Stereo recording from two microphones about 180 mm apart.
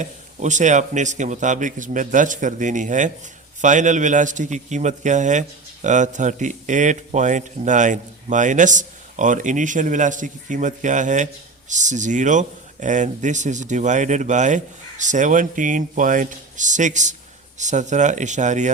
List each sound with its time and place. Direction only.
0.0 s a man's voice: 45° right (ahead or behind)